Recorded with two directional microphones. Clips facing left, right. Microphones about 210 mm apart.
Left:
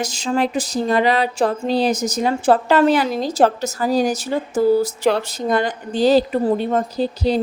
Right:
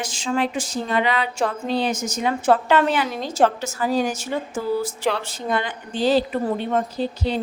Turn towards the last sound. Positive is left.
turn(degrees=35)  # may be behind; listen again after turning